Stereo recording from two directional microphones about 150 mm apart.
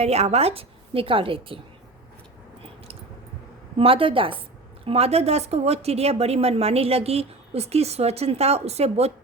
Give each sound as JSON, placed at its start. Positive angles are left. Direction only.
{"t": 0.0, "sound": "a woman's voice", "side_deg": -45}
{"t": 3.8, "sound": "a woman's voice", "side_deg": -40}